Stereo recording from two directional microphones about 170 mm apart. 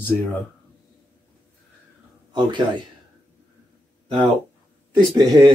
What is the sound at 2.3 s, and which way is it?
Speech, 25° right (ahead or behind).